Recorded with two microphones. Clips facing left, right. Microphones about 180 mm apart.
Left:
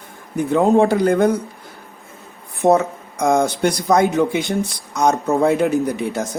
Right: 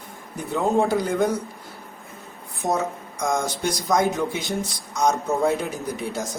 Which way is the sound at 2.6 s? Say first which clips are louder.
Left 9 dB; 60° left (ahead or behind).